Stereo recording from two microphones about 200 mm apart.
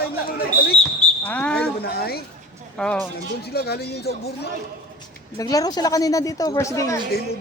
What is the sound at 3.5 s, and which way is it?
Speech, 50° left (ahead or behind).